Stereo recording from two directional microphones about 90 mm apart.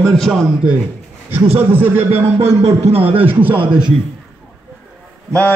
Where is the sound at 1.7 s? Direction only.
25° right (ahead or behind).